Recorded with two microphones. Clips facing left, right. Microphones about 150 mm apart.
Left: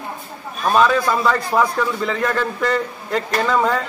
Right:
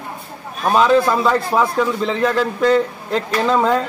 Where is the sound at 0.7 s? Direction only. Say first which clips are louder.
Right 3 dB; 20° right (ahead or behind).